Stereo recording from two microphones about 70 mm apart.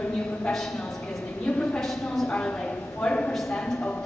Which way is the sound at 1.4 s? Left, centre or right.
Centre.